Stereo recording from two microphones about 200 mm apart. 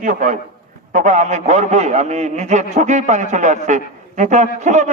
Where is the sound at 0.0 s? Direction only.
40° right (ahead or behind).